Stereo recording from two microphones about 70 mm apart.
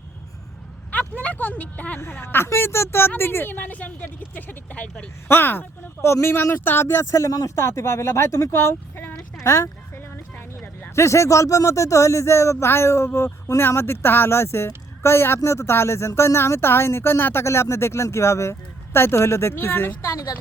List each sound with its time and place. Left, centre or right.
0.9 s speech: left
2.0 s a woman's voice: left
5.3 s speech: left
7.6 s speech: left
9.4 s a sound: left
10.9 s speech: left